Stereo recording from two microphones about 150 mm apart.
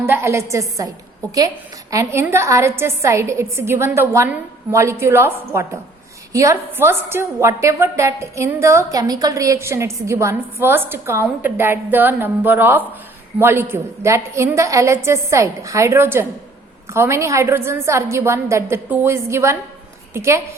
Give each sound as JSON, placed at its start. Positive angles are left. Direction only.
{"t": 0.0, "sound": "a woman's voice", "side_deg": -15}
{"t": 1.9, "sound": "a woman's voice", "side_deg": -20}